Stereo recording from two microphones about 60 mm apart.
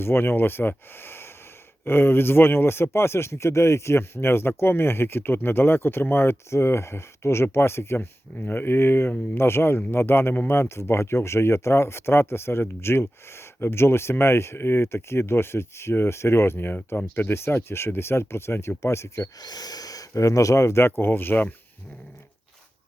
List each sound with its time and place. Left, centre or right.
0.0 s speech: left